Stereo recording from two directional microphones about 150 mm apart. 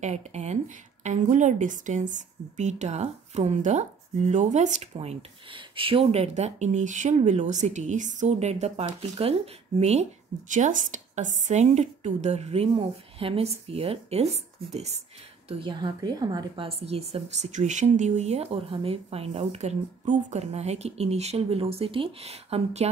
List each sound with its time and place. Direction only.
0.0 s a woman's voice: 50° right (ahead or behind)
10.5 s a woman's voice: 55° right (ahead or behind)
15.4 s a woman's voice: 35° right (ahead or behind)